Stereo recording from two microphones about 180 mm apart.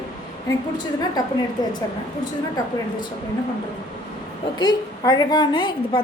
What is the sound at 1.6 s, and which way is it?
Speech, 20° left (ahead or behind).